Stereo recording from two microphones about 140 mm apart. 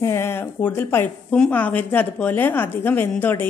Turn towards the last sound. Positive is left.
turn(degrees=15)  # may be behind; listen again after turning